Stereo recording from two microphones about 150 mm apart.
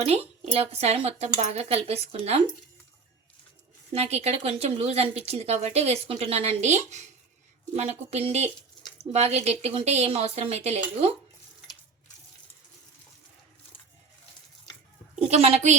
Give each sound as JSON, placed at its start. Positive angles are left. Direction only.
{"t": 0.0, "sound": "speech", "side_deg": -45}
{"t": 3.9, "sound": "speech", "side_deg": -45}
{"t": 15.3, "sound": "speech", "side_deg": -45}